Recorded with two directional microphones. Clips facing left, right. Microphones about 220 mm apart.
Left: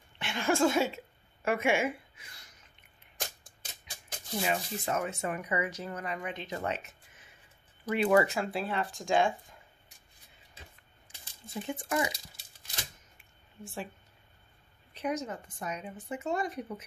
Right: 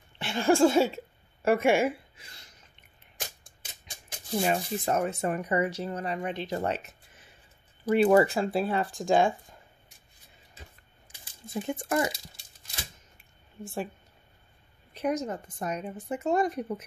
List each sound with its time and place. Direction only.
0.2 s speech: 35° right (ahead or behind)
4.4 s speech: 40° right (ahead or behind)
11.7 s speech: 45° right (ahead or behind)
15.0 s speech: 45° right (ahead or behind)